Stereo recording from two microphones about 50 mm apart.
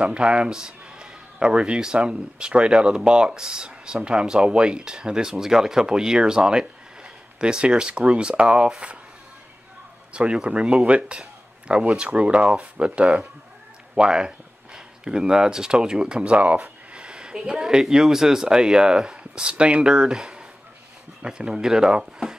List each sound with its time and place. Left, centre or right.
0.0 s a man's voice: centre
10.1 s speech: right
10.9 s a sound: right
11.8 s a man's voice: right